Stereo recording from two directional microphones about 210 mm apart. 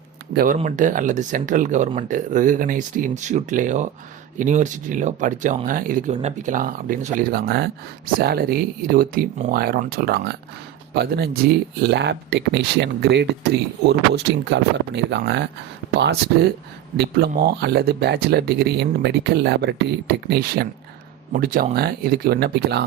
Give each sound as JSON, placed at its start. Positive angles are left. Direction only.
{"t": 0.3, "sound": "speech", "side_deg": -40}